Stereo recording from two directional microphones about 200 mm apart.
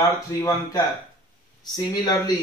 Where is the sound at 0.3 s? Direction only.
15° left (ahead or behind).